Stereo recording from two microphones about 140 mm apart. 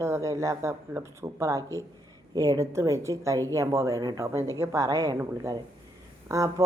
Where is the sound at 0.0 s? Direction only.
20° right (ahead or behind).